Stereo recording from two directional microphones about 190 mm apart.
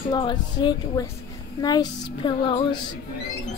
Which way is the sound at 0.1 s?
25° left (ahead or behind).